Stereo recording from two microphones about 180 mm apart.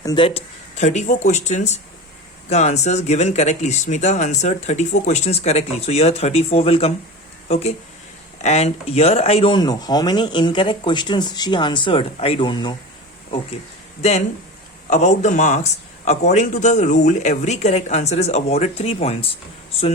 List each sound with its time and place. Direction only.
0.0 s speech: 25° left (ahead or behind)
14.0 s speech: 35° left (ahead or behind)